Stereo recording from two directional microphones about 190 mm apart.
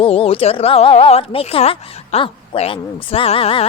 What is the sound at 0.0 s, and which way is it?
Speech, 30° left (ahead or behind).